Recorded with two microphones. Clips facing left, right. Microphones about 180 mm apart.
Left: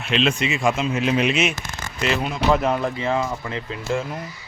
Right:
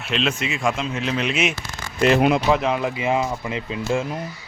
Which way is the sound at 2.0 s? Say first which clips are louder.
Right 8 dB; 50° right (ahead or behind).